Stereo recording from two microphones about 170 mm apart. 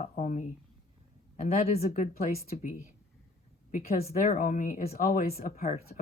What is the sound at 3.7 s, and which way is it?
Speech, 60° left (ahead or behind).